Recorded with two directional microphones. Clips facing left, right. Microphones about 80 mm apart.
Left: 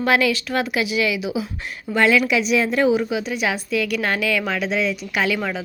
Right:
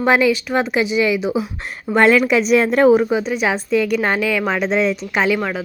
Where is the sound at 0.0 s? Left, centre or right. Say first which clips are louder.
Right 4 dB; right.